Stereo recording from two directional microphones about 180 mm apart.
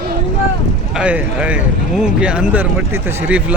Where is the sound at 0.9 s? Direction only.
5° right (ahead or behind).